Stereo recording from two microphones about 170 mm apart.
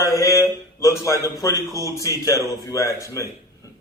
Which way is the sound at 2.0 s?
20° left (ahead or behind).